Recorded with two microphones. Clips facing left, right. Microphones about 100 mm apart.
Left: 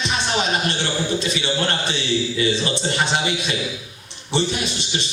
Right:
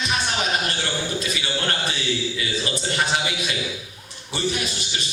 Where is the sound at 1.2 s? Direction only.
25° left (ahead or behind).